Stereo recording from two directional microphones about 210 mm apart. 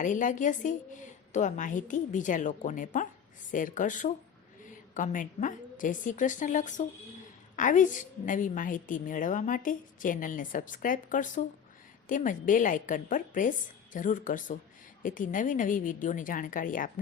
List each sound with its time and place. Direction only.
0.0 s a woman's voice: 35° left (ahead or behind)